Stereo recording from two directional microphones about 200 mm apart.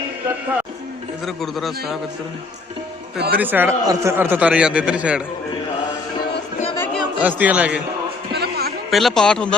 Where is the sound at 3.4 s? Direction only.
10° right (ahead or behind).